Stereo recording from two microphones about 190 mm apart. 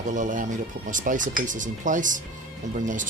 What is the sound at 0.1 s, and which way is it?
Speech, 40° right (ahead or behind).